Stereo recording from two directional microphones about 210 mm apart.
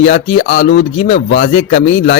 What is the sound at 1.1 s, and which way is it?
Speech, 55° left (ahead or behind).